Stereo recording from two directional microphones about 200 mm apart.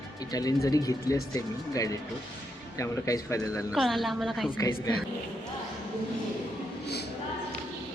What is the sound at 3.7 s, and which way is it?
Speech, centre (ahead or behind).